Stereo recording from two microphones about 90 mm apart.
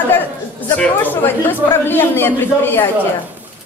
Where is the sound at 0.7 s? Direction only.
20° left (ahead or behind).